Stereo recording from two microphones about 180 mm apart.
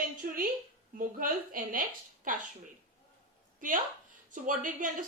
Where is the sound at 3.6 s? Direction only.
50° right (ahead or behind).